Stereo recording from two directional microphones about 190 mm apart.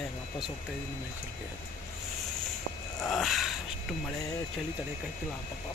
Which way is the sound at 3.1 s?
Centre (ahead or behind).